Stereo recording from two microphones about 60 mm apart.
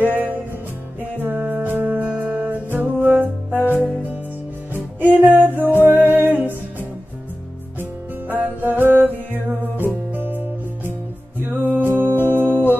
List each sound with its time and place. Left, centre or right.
0.0 s music: right
5.0 s music: right
8.3 s music: right